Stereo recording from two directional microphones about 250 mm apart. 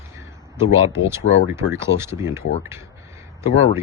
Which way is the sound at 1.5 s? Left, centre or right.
Centre.